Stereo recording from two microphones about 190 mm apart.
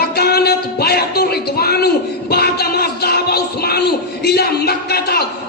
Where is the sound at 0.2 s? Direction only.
55° left (ahead or behind).